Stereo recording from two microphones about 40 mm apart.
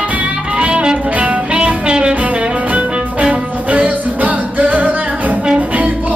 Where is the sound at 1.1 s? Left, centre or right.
Right.